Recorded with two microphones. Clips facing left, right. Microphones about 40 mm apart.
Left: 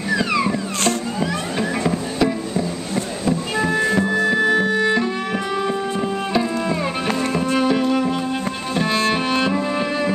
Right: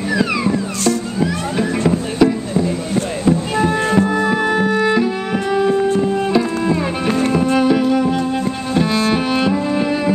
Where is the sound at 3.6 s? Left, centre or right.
Right.